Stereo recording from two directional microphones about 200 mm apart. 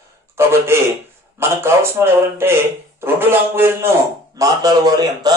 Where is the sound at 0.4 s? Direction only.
10° right (ahead or behind).